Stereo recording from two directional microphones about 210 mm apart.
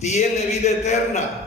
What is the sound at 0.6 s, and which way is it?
Speech, 35° left (ahead or behind).